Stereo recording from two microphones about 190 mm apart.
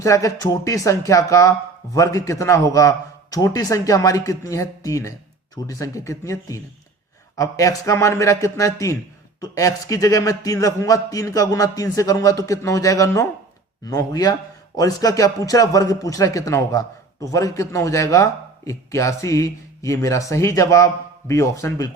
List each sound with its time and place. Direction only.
0.0 s a man's voice: 15° left (ahead or behind)